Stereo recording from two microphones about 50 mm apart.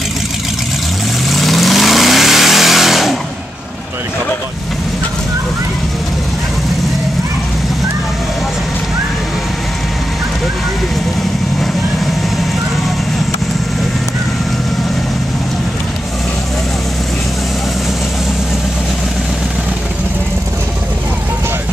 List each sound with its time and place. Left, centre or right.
1.3 s vehicle: centre